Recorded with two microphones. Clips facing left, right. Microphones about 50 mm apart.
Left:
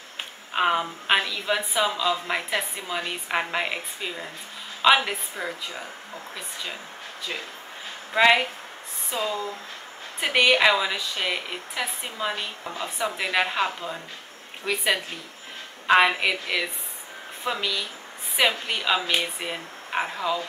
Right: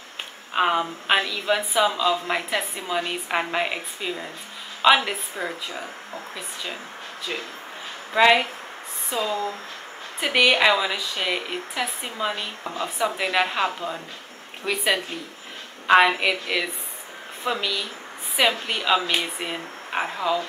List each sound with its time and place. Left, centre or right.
0.5 s a woman's voice: centre
8.1 s a woman's voice: centre
9.3 s speech: right
10.2 s a woman's voice: centre
15.9 s a woman's voice: centre